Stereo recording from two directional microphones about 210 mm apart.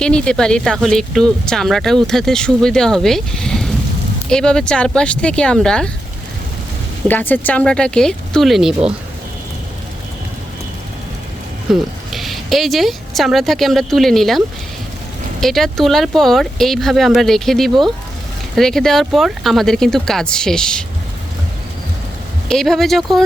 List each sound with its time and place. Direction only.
0.0 s speech: 5° left (ahead or behind)
7.1 s speech: 10° left (ahead or behind)
11.7 s speech: centre (ahead or behind)
22.4 s speech: centre (ahead or behind)